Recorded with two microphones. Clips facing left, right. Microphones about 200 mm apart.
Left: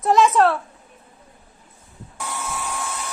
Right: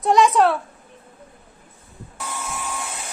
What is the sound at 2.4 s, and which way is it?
Dental drill, 10° right (ahead or behind).